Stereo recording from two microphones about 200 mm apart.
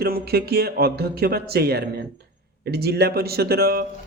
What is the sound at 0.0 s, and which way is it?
Speech, 50° right (ahead or behind).